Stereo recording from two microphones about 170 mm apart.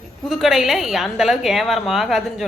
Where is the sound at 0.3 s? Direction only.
Centre (ahead or behind).